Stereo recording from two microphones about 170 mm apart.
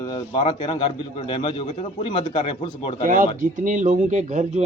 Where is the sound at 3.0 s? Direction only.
50° right (ahead or behind).